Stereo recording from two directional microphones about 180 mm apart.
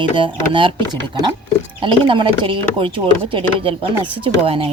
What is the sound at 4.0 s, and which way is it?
Speech, 30° right (ahead or behind).